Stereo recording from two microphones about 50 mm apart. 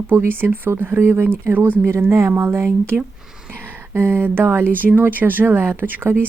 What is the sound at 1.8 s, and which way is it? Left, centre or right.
Speech, right.